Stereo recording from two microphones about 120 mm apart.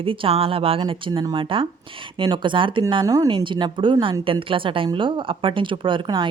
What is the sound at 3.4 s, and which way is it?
A woman's voice, 40° right (ahead or behind).